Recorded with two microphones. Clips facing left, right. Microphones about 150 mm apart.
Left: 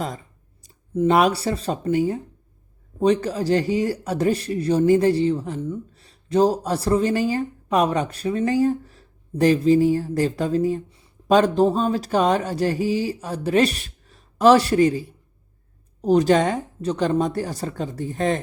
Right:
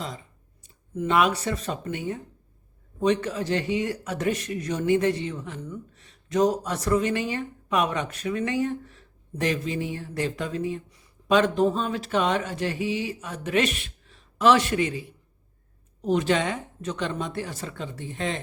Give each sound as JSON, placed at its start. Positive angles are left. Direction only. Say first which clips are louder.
{"t": 0.6, "sound": "speech", "louder": "left 9 dB", "side_deg": 35}
{"t": 10.8, "sound": "speech", "louder": "left 5 dB", "side_deg": 25}